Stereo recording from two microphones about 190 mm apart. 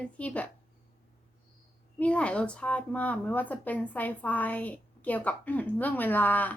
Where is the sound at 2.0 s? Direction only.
5° left (ahead or behind).